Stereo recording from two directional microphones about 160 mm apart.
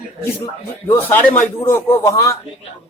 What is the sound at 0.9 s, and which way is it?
Speech, 15° left (ahead or behind).